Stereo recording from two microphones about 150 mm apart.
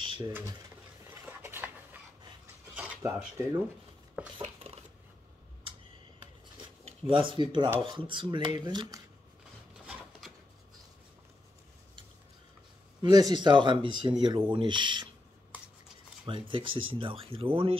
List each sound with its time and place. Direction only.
0.0 s a sound: 35° right (ahead or behind)
0.3 s speech: 20° right (ahead or behind)
1.4 s a sound: 15° right (ahead or behind)
2.7 s cutlery: 10° right (ahead or behind)
4.4 s cutlery: 40° right (ahead or behind)
6.8 s speech: 40° right (ahead or behind)
13.0 s speech: 30° right (ahead or behind)
16.3 s speech: 35° right (ahead or behind)